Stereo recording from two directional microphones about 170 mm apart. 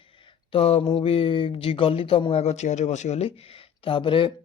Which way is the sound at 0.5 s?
35° left (ahead or behind).